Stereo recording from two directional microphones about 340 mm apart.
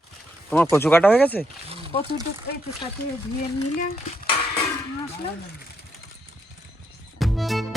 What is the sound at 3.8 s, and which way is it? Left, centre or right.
Speech, left.